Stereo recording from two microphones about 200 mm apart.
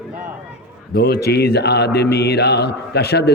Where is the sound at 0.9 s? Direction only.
50° left (ahead or behind).